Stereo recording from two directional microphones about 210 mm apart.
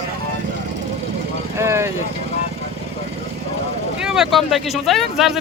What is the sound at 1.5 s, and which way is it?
Speech, 15° right (ahead or behind).